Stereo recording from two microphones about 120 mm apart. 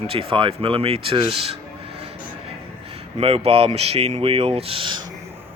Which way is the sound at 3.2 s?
55° right (ahead or behind).